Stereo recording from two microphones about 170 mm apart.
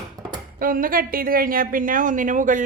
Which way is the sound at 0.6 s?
55° right (ahead or behind).